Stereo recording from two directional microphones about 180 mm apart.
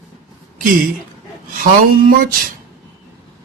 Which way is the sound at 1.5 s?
50° right (ahead or behind).